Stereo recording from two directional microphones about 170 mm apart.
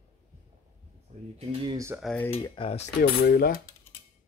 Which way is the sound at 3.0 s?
60° left (ahead or behind).